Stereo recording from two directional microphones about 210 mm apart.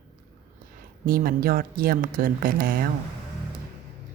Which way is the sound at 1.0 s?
45° right (ahead or behind).